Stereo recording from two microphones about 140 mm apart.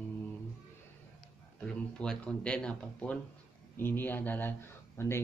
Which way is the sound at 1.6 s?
5° left (ahead or behind).